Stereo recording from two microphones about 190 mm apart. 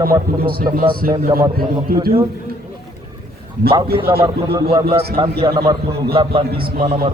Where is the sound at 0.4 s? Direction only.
50° right (ahead or behind).